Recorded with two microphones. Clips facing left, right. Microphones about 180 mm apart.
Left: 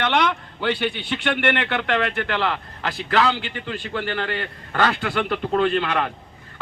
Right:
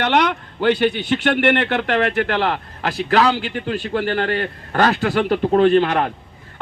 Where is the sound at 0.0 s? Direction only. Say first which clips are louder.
Right 3 dB; 45° right (ahead or behind).